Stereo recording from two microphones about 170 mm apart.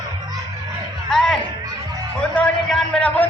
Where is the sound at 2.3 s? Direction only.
5° left (ahead or behind).